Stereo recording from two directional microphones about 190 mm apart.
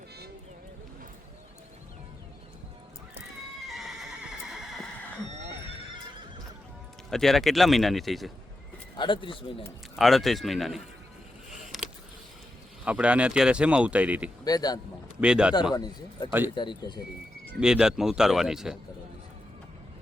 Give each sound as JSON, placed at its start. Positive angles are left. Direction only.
{"t": 3.7, "sound": "horse", "side_deg": 0}
{"t": 7.1, "sound": "speech", "side_deg": 0}
{"t": 9.0, "sound": "speech", "side_deg": 25}
{"t": 9.9, "sound": "speech", "side_deg": 0}
{"t": 11.6, "sound": "a sound", "side_deg": 0}
{"t": 12.8, "sound": "speech", "side_deg": -5}
{"t": 14.4, "sound": "speech", "side_deg": 20}
{"t": 15.2, "sound": "speech", "side_deg": -5}
{"t": 15.7, "sound": "speech", "side_deg": 20}
{"t": 17.6, "sound": "speech", "side_deg": -5}